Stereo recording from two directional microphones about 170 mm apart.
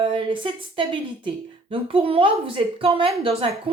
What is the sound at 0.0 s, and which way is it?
A woman's voice, 30° right (ahead or behind).